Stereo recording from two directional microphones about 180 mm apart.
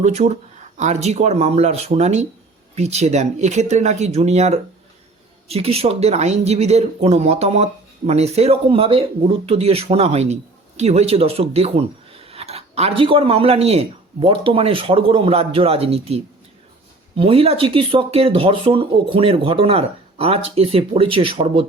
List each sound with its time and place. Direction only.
0.0 s speech: 40° right (ahead or behind)